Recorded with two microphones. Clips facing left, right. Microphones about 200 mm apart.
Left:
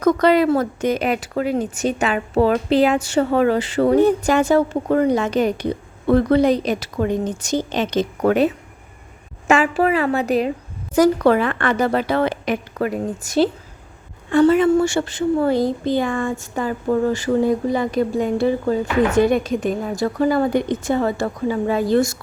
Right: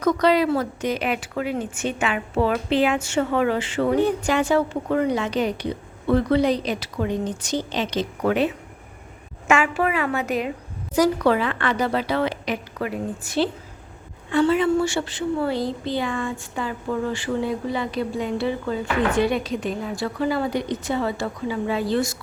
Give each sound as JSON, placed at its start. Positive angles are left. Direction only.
{"t": 0.0, "sound": "speech", "side_deg": 50}
{"t": 9.5, "sound": "a woman's voice", "side_deg": 35}
{"t": 10.9, "sound": "speech", "side_deg": 50}